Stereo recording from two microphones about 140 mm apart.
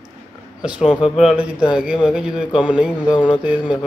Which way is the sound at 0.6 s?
5° right (ahead or behind).